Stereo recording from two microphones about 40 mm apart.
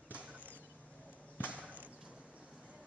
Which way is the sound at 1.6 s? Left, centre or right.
Right.